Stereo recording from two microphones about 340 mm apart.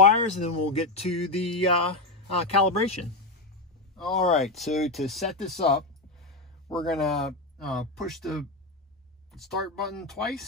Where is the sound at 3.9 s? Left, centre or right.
Centre.